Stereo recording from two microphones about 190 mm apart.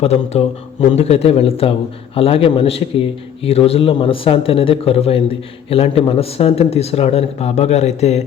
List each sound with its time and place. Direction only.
0.0 s a man's voice: 30° left (ahead or behind)